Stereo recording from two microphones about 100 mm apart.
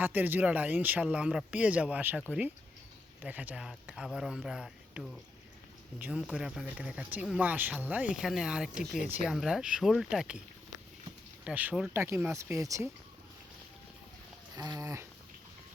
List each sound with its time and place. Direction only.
0.0 s speech: 20° right (ahead or behind)
3.8 s speech: 5° right (ahead or behind)
11.4 s speech: 15° right (ahead or behind)
11.9 s speech: 25° right (ahead or behind)
14.5 s a sound: 35° right (ahead or behind)